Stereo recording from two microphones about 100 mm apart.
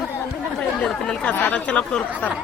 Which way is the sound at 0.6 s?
10° left (ahead or behind).